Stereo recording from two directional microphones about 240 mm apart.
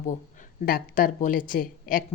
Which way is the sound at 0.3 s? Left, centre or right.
Left.